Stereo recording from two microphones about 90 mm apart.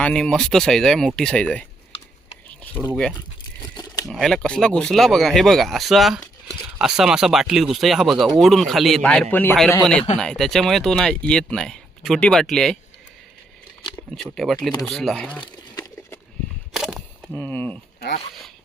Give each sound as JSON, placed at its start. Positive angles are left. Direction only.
{"t": 0.0, "sound": "speech", "side_deg": 10}
{"t": 2.9, "sound": "speech", "side_deg": 10}
{"t": 3.8, "sound": "a sound", "side_deg": 45}
{"t": 4.1, "sound": "speech", "side_deg": 5}
{"t": 9.0, "sound": "speech", "side_deg": 15}
{"t": 10.2, "sound": "speech", "side_deg": 5}
{"t": 14.3, "sound": "speech", "side_deg": 0}
{"t": 16.7, "sound": "a sound", "side_deg": -5}
{"t": 17.3, "sound": "speech", "side_deg": 20}